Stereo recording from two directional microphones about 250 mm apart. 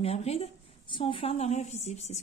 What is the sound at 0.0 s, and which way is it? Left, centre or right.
A woman's voice, left.